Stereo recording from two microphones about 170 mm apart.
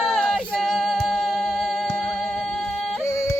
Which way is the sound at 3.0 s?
15° left (ahead or behind).